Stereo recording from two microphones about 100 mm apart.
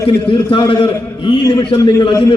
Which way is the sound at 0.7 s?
55° left (ahead or behind).